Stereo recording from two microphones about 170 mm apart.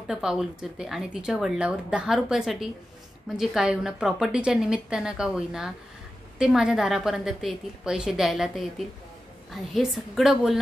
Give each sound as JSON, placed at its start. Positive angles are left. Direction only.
{"t": 0.0, "sound": "speech", "side_deg": -5}